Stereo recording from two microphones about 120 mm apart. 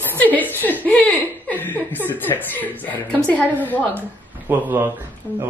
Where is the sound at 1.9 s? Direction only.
15° left (ahead or behind).